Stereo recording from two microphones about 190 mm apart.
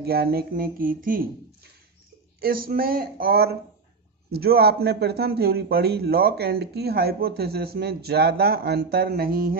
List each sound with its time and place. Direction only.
0.0 s speech: 55° right (ahead or behind)